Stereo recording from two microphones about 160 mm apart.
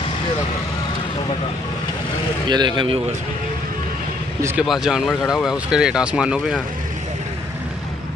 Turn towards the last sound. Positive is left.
turn(degrees=-5)  # may be behind; listen again after turning